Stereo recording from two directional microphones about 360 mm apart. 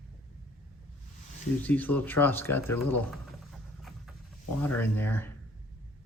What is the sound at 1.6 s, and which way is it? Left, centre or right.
Speech, centre.